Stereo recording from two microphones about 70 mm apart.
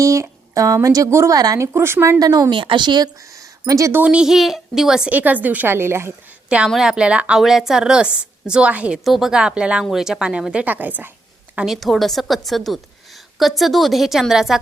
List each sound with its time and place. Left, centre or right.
0.0 s speech: right
2.1 s speech: right
3.2 s a sound: right
3.7 s a woman's voice: right
4.0 s a woman's voice: centre
5.1 s a woman's voice: right
6.7 s a woman's voice: centre
9.0 s a woman's voice: centre; by 11.1 s right
11.6 s a woman's voice: centre